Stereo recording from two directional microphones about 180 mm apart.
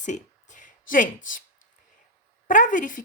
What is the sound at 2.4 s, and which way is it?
Speech, 45° left (ahead or behind).